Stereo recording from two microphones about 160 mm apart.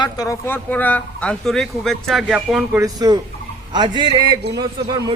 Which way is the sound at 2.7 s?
25° right (ahead or behind).